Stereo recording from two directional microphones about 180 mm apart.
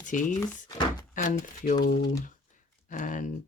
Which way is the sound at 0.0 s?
45° left (ahead or behind).